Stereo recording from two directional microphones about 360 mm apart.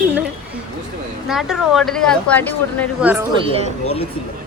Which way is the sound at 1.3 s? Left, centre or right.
Centre.